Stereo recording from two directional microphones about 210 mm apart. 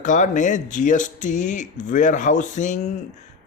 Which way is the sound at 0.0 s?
35° left (ahead or behind).